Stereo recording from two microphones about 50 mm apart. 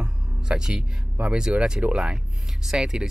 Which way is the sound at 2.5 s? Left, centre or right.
Centre.